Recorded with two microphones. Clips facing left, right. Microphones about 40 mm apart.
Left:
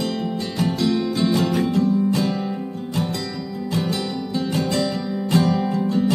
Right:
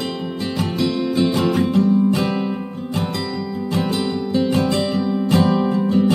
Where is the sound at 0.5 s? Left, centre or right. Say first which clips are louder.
Even; centre.